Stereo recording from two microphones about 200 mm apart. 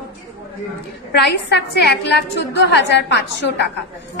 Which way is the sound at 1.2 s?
55° left (ahead or behind).